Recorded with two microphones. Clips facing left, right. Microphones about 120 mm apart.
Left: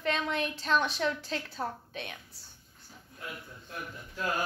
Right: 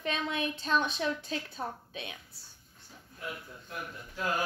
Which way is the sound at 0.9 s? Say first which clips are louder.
Left 1 dB; 20° right (ahead or behind).